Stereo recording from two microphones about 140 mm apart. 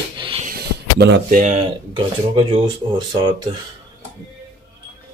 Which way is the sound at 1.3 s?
65° right (ahead or behind).